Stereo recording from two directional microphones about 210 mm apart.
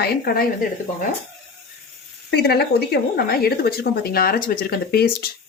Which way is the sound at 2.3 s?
50° left (ahead or behind).